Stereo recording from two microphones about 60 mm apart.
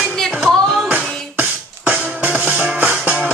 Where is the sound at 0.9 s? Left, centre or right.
Right.